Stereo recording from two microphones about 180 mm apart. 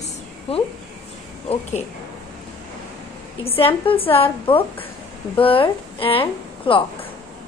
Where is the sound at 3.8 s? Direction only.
30° left (ahead or behind).